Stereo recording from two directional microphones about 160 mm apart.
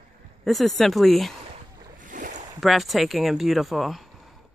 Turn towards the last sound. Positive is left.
turn(degrees=0)  # may be behind; listen again after turning